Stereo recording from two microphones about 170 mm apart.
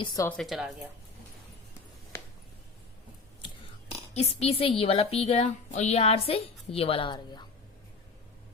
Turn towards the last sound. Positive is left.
turn(degrees=25)  # may be behind; listen again after turning